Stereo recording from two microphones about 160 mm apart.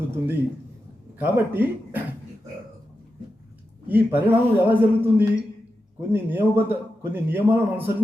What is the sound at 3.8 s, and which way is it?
A man's voice, 10° right (ahead or behind).